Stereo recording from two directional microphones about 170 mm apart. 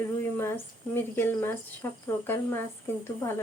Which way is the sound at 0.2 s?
15° left (ahead or behind).